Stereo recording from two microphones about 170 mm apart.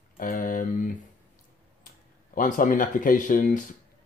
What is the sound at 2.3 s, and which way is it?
Speech, 50° left (ahead or behind).